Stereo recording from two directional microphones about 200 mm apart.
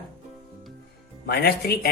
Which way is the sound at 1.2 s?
50° left (ahead or behind).